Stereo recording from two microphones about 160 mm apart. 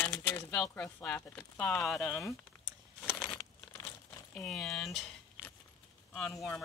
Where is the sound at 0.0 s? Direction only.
15° left (ahead or behind).